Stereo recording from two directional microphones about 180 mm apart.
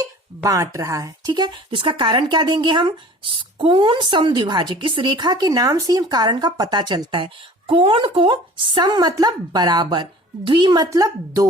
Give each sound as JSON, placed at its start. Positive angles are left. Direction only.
{"t": 0.4, "sound": "speech", "side_deg": -20}